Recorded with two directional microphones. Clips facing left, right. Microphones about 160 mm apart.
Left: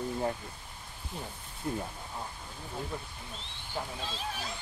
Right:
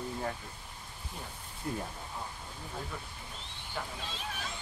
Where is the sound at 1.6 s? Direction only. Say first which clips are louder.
Left 2 dB; 25° left (ahead or behind).